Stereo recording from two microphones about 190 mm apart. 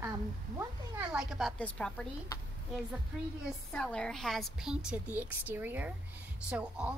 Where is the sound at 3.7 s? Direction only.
5° left (ahead or behind).